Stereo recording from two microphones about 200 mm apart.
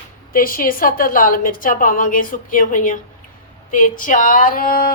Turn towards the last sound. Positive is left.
turn(degrees=45)  # may be behind; listen again after turning